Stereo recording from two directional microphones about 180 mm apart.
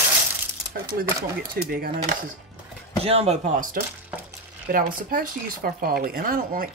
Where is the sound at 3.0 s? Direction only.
35° right (ahead or behind); by 6.6 s 55° right (ahead or behind).